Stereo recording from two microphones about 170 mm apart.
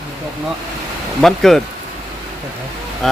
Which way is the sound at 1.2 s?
Centre (ahead or behind).